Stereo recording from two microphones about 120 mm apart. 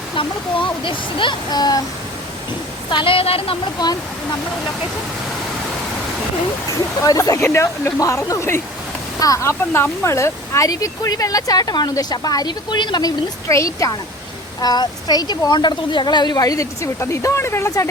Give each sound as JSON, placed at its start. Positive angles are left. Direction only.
{"t": 0.2, "sound": "speech", "side_deg": 45}
{"t": 2.9, "sound": "speech", "side_deg": 45}
{"t": 7.0, "sound": "speech", "side_deg": 30}